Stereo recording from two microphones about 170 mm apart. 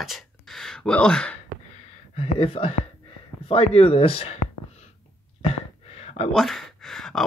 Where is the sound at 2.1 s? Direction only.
35° left (ahead or behind).